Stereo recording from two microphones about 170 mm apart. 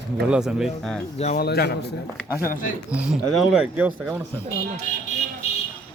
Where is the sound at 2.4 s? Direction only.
55° left (ahead or behind).